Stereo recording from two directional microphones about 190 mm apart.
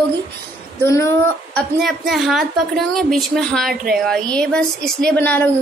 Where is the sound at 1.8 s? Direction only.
Centre (ahead or behind).